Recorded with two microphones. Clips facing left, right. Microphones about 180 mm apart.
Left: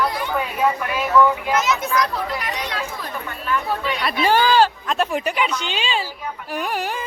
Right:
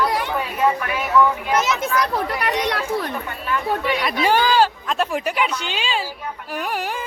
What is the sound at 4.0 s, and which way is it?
Speech, 15° right (ahead or behind).